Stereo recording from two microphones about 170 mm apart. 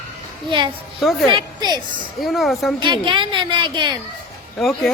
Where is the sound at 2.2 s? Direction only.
Centre (ahead or behind).